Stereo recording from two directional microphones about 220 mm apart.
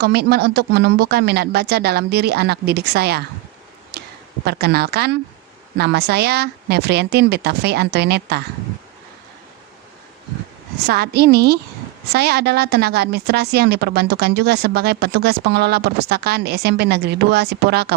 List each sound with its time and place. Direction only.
0.0 s a woman's voice: 45° right (ahead or behind)
3.9 s a sound: 50° right (ahead or behind)
4.4 s a woman's voice: 45° right (ahead or behind)
10.8 s a woman's voice: 45° right (ahead or behind)